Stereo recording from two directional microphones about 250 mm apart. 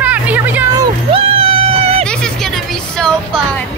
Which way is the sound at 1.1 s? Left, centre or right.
Right.